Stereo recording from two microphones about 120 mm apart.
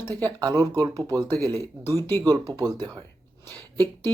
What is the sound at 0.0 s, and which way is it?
Speech, 15° left (ahead or behind).